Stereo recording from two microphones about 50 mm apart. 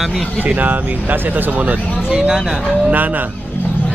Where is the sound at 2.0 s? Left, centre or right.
Centre.